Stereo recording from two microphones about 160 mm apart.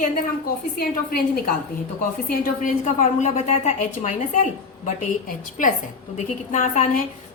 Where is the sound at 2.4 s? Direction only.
50° left (ahead or behind).